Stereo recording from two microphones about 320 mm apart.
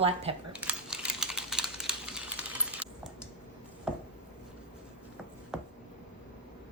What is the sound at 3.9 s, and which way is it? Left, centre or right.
Chopping, centre.